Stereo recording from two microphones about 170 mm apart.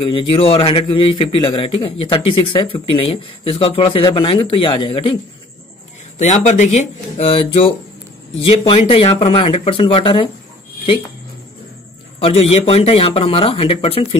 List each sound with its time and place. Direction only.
0.0 s a man's voice: 30° left (ahead or behind)
6.1 s a man's voice: 45° left (ahead or behind); by 10.3 s 30° left (ahead or behind)
12.2 s a man's voice: 35° left (ahead or behind)